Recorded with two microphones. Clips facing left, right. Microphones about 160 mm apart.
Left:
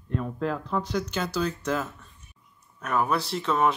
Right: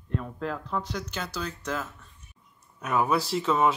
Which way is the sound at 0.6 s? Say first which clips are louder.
Left 4 dB; 25° left (ahead or behind).